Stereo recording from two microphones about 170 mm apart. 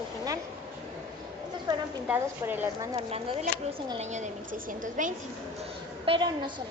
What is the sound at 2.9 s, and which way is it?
Speech, 30° right (ahead or behind).